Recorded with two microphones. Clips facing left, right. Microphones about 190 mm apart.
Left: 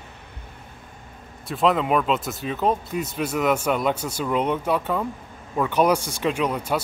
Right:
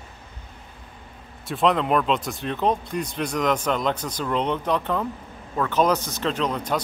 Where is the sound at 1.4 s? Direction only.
Centre (ahead or behind).